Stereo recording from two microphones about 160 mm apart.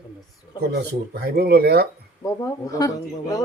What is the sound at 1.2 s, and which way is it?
Speech, 75° right (ahead or behind).